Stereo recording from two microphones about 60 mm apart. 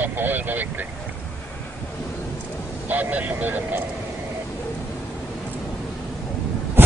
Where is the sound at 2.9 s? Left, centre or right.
Right.